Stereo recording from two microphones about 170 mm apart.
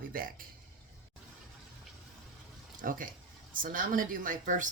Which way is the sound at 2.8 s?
55° right (ahead or behind).